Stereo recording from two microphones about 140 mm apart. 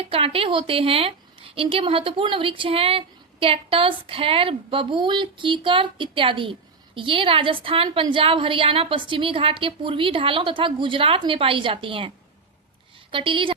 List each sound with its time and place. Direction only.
0.0 s a woman's voice: 40° right (ahead or behind)